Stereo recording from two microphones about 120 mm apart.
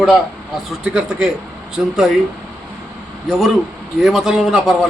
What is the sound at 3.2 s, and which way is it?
A man's voice, centre (ahead or behind).